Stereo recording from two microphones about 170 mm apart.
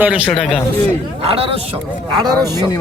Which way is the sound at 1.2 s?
35° right (ahead or behind).